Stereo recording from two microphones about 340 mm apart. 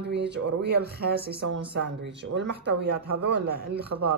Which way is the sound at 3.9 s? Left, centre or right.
Right.